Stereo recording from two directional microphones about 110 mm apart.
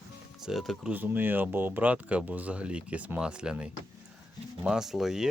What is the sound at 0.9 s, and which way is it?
Speech, 15° right (ahead or behind).